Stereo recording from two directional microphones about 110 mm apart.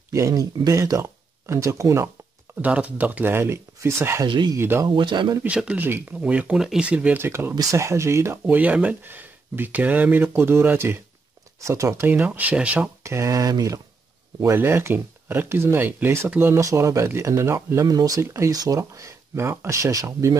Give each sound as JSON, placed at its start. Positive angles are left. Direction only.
{"t": 0.1, "sound": "speech", "side_deg": -30}
{"t": 2.6, "sound": "speech", "side_deg": -10}
{"t": 4.3, "sound": "a man's voice", "side_deg": -45}
{"t": 4.6, "sound": "speech", "side_deg": -25}
{"t": 4.8, "sound": "a man's voice", "side_deg": -45}
{"t": 5.4, "sound": "speech", "side_deg": -10}
{"t": 12.1, "sound": "speech", "side_deg": -15}
{"t": 13.0, "sound": "speech", "side_deg": -25}